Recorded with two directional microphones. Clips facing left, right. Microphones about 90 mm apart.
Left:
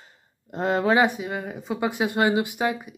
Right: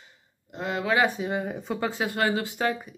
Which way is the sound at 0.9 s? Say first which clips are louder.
Left 1 dB; 20° left (ahead or behind).